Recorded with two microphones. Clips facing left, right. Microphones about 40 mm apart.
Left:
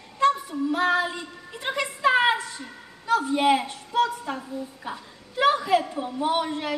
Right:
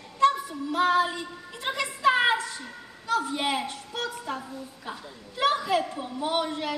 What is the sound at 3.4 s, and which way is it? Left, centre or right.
Speech, left.